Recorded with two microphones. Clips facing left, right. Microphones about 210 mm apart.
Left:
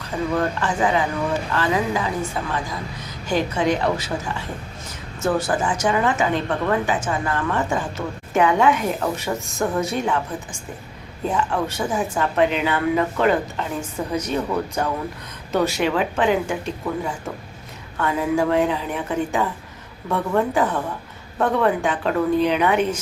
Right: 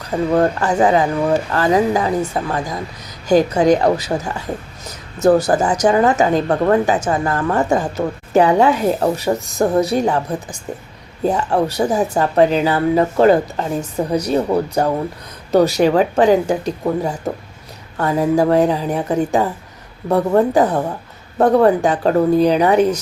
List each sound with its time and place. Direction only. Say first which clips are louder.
0.3 s speech: right 7 dB; 40° right (ahead or behind)